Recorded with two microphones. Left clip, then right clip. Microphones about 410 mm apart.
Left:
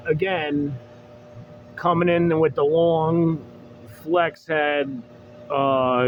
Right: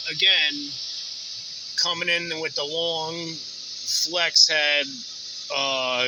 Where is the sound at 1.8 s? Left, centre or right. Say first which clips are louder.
Left 6 dB; left.